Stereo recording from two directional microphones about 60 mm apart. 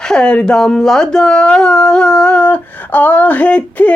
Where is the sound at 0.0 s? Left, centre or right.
Centre.